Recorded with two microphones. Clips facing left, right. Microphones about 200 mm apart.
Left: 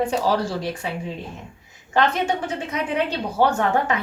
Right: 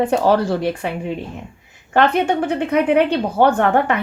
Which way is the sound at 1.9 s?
60° right (ahead or behind).